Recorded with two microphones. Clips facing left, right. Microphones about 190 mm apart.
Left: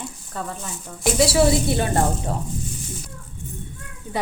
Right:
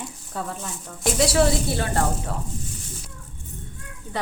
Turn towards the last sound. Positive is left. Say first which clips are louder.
# left 3 dB
turn(degrees=10)  # may be behind; listen again after turning